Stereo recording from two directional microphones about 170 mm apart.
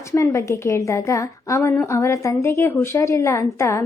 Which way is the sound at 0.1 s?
15° left (ahead or behind).